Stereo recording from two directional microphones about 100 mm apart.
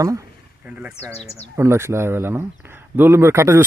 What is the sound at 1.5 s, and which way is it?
Speech, 25° right (ahead or behind).